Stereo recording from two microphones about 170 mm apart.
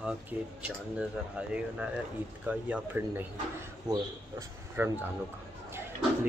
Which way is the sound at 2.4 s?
10° right (ahead or behind).